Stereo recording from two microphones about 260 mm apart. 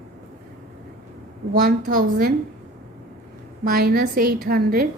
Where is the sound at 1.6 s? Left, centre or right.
Right.